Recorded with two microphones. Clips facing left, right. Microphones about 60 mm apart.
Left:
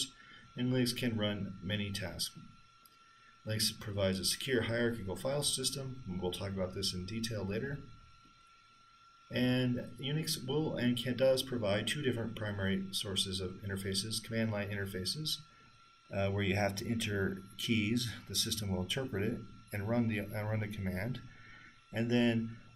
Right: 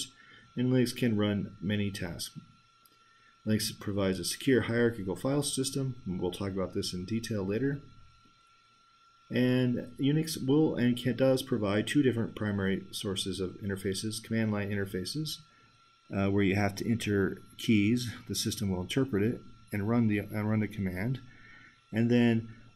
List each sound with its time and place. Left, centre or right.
0.6 s speech: right
3.4 s speech: right
6.8 s speech: centre
9.3 s speech: right
16.1 s speech: right
19.7 s speech: right